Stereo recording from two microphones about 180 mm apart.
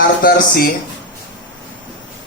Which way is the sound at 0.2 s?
55° left (ahead or behind).